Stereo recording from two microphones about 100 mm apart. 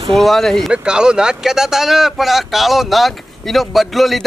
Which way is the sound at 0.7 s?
10° right (ahead or behind).